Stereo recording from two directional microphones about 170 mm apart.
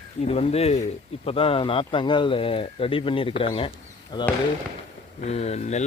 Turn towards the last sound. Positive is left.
turn(degrees=40)  # may be behind; listen again after turning